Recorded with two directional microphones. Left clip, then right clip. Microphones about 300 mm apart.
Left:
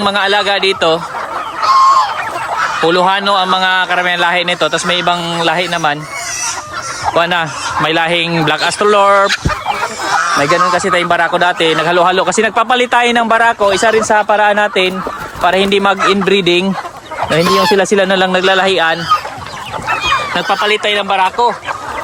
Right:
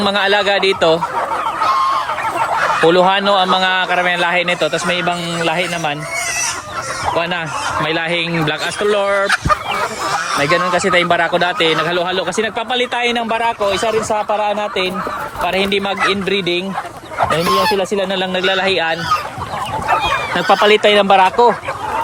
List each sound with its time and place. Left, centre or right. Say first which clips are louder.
0.0 s a man's voice: left 2 dB; centre
1.6 s fowl: left 8 dB; left
2.8 s a man's voice: left 1 dB; centre
7.1 s a man's voice: left 7 dB; centre
10.4 s speech: left 3 dB; centre
20.5 s speech: right 4 dB; centre